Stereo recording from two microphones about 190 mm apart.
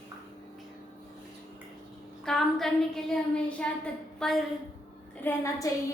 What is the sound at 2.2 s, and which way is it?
Child singing, centre (ahead or behind).